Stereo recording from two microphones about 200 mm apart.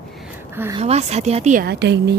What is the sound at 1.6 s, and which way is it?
Speech, 60° right (ahead or behind).